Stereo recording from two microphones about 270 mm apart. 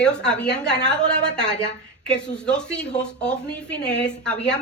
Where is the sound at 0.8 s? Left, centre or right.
Centre.